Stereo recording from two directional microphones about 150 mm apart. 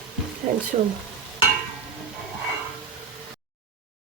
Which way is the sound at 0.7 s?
45° right (ahead or behind).